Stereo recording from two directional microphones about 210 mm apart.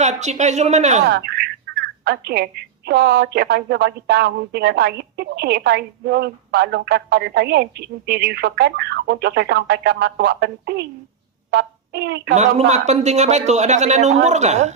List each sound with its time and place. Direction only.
0.0 s speech: 35° right (ahead or behind)
1.1 s speech: 50° right (ahead or behind)
12.3 s speech: 30° right (ahead or behind)